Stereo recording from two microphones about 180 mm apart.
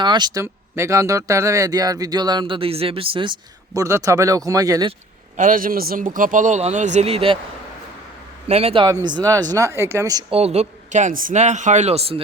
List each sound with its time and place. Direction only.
0.0 s speech: 25° right (ahead or behind)
3.8 s speech: 20° right (ahead or behind)
5.4 s a man's voice: 50° right (ahead or behind); by 7.3 s 30° right (ahead or behind)
8.4 s speech: 35° right (ahead or behind); by 10.3 s 20° right (ahead or behind)
10.3 s speech: 35° right (ahead or behind)